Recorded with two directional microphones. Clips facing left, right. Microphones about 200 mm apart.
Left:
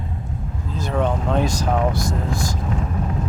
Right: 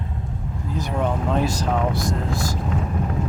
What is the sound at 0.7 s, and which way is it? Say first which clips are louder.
Speech: left 2 dB; 15° right (ahead or behind).